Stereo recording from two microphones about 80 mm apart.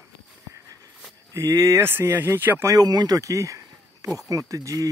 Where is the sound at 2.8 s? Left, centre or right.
Right.